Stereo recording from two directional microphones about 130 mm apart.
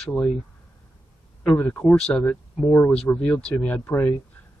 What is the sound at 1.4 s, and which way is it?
Speech, 10° left (ahead or behind).